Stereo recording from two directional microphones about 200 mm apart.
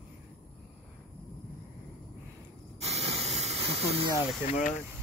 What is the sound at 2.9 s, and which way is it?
Hiss, 35° right (ahead or behind).